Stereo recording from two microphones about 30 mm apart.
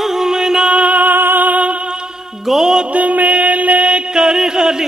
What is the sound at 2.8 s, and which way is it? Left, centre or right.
Music, right.